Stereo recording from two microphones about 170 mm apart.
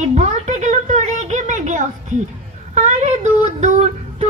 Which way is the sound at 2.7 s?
45° right (ahead or behind).